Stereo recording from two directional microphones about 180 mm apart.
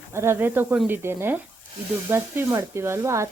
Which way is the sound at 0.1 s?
15° right (ahead or behind).